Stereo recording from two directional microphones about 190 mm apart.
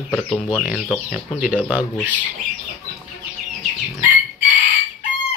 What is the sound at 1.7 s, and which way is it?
Speech, 10° right (ahead or behind).